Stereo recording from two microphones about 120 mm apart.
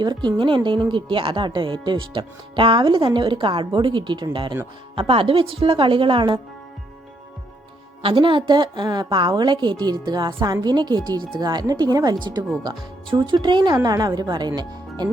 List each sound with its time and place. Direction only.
0.0 s a woman's voice: 40° right (ahead or behind)
8.0 s a woman's voice: 45° right (ahead or behind)